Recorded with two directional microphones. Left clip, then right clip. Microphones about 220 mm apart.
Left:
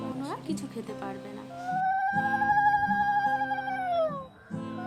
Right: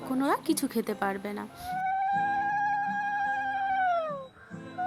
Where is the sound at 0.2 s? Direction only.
35° right (ahead or behind).